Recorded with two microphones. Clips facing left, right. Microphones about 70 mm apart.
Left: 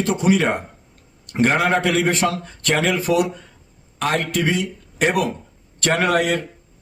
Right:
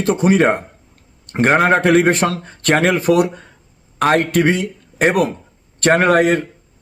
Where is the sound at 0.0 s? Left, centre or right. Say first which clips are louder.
Right 4 dB; right.